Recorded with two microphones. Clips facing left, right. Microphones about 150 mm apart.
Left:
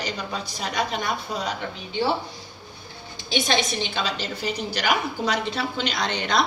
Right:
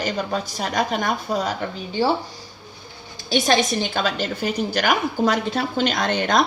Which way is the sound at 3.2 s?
45° right (ahead or behind).